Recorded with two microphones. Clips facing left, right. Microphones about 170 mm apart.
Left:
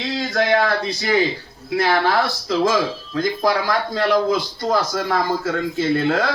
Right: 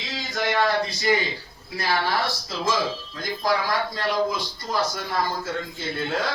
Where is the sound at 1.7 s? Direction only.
90° left.